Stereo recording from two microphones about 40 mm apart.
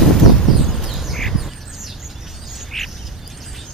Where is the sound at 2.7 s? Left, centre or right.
Centre.